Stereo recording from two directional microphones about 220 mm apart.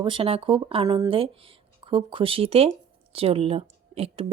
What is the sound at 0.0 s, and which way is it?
A woman's voice, 25° right (ahead or behind).